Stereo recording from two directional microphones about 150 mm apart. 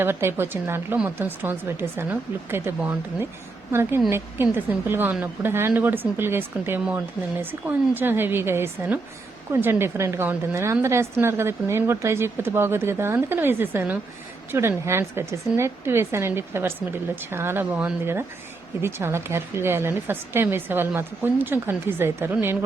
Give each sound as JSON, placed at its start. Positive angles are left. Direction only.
{"t": 0.0, "sound": "a woman's voice", "side_deg": -15}